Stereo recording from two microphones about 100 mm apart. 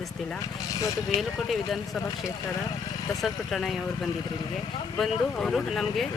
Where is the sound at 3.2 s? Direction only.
Centre (ahead or behind).